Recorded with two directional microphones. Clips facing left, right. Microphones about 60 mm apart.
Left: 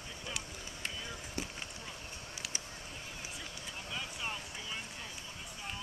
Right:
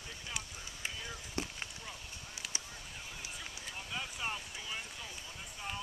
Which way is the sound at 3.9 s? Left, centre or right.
Centre.